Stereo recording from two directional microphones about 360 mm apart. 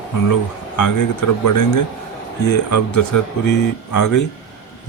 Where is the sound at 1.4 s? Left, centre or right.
Left.